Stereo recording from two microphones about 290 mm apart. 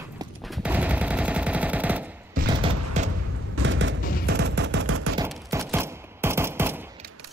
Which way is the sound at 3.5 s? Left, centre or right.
Right.